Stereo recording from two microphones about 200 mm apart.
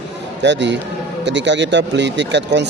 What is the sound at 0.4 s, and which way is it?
A man's voice, 60° right (ahead or behind).